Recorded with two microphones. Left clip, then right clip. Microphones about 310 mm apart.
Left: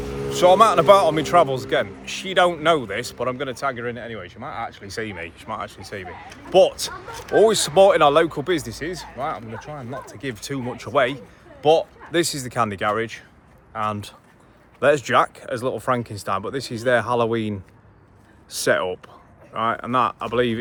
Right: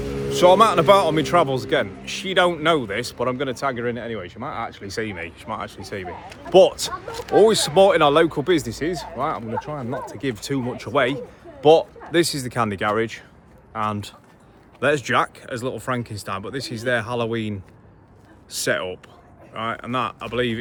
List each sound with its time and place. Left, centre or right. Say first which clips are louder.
0.0 s vehicle: right 1 dB; centre
0.3 s a man's voice: even; centre